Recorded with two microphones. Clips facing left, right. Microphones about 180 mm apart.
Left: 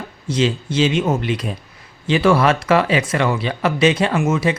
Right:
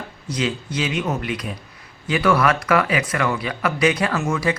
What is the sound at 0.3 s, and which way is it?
Speech, 25° left (ahead or behind).